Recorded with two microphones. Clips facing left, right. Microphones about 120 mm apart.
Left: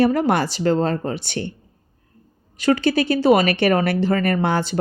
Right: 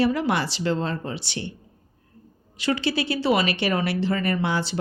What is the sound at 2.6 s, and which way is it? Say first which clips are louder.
Speech: left 7 dB; 45° left (ahead or behind).